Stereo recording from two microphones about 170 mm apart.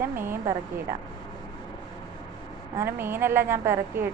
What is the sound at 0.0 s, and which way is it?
Speech, 15° right (ahead or behind).